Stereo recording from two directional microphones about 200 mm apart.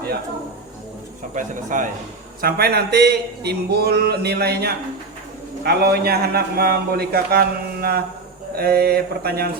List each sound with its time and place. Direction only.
1.3 s a man's voice: 40° right (ahead or behind)
2.4 s a man's voice: 50° right (ahead or behind)